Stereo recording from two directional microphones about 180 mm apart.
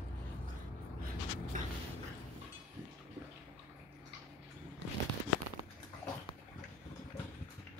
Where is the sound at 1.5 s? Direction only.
45° right (ahead or behind).